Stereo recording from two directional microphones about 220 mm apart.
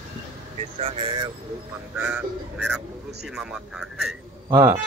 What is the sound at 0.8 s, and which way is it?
Vehicle, 20° right (ahead or behind).